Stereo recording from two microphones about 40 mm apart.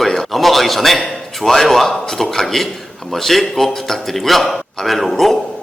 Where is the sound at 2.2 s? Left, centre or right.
Centre.